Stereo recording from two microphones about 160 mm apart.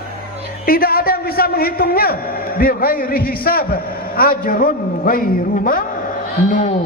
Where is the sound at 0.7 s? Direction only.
70° left (ahead or behind).